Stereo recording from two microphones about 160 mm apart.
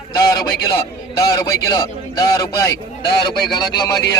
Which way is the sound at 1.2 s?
20° left (ahead or behind).